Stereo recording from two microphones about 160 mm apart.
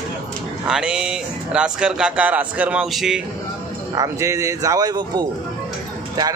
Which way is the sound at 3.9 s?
20° right (ahead or behind).